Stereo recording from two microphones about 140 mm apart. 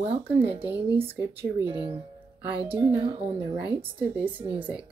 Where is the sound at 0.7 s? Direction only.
15° right (ahead or behind).